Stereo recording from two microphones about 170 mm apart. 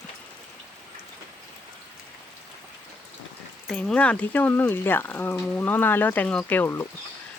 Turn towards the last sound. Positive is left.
turn(degrees=15)  # may be behind; listen again after turning